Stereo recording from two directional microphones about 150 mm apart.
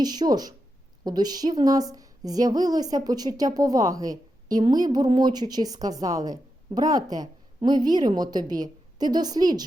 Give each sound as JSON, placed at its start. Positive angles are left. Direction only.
{"t": 0.0, "sound": "speech", "side_deg": -25}